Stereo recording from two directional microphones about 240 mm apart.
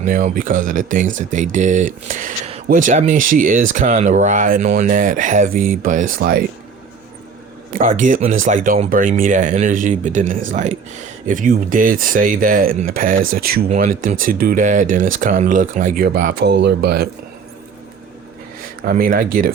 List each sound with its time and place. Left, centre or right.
0.0 s speech: right
7.8 s speech: right
18.9 s speech: right